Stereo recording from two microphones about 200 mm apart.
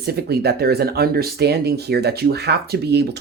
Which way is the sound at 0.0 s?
50° right (ahead or behind).